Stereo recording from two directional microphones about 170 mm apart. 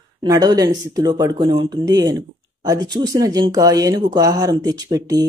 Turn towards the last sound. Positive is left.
turn(degrees=-20)  # may be behind; listen again after turning